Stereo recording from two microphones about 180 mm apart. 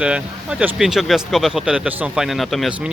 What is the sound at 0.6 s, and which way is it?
Speech, centre (ahead or behind).